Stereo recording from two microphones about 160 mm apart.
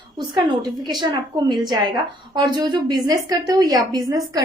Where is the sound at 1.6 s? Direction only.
25° right (ahead or behind).